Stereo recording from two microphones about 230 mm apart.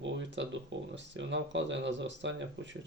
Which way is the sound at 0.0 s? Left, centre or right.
Right.